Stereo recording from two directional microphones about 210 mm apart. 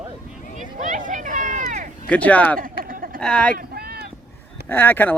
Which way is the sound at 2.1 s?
5° left (ahead or behind).